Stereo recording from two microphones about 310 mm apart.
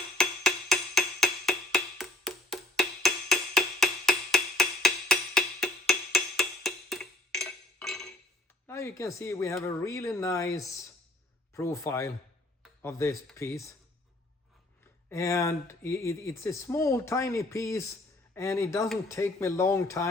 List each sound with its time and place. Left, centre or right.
0.2 s wood block: centre
8.6 s speech: centre
15.1 s speech: centre